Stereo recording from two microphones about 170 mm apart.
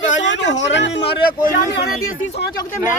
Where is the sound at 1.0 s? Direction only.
30° left (ahead or behind).